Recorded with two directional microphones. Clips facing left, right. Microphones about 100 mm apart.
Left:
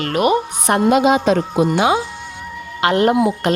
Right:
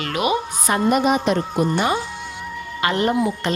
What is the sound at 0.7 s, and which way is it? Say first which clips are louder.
Speech: left 4 dB; 75° left (ahead or behind).